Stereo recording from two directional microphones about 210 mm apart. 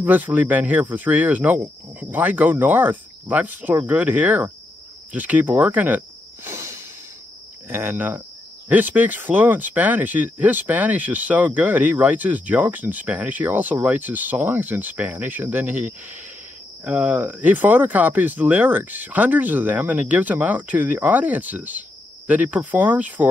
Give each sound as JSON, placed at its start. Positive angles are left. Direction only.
{"t": 0.0, "sound": "speech", "side_deg": -10}